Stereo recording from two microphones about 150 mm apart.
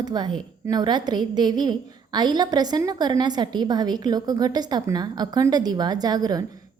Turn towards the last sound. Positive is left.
turn(degrees=-25)  # may be behind; listen again after turning